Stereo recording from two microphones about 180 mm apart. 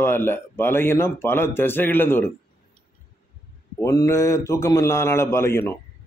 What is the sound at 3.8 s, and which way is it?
A man's voice, 20° left (ahead or behind).